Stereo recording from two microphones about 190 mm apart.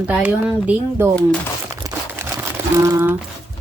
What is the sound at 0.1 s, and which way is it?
A woman's voice, 5° right (ahead or behind).